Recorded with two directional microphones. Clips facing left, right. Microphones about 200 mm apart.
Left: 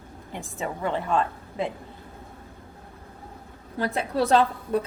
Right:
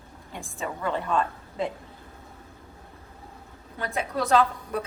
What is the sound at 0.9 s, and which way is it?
Speech, 20° left (ahead or behind).